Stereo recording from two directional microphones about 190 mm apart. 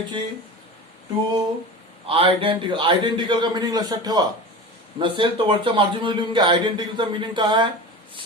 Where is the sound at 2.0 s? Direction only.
30° right (ahead or behind).